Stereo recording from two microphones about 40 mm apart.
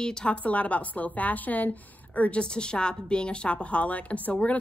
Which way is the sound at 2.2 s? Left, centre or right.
Left.